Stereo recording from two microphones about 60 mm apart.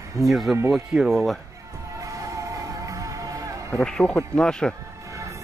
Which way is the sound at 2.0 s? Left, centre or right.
Right.